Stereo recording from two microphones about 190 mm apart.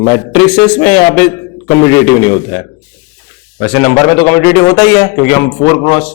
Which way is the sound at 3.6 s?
15° left (ahead or behind).